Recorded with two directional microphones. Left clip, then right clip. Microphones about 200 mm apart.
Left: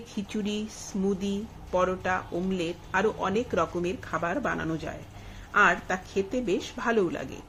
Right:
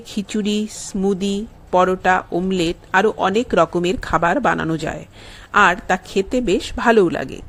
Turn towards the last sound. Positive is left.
turn(degrees=-45)  # may be behind; listen again after turning